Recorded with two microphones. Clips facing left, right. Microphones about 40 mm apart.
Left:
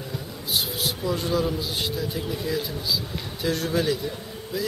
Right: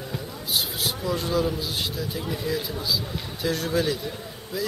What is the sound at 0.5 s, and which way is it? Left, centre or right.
A man's voice, centre.